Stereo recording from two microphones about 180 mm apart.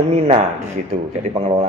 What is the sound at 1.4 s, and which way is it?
Speech, 35° right (ahead or behind).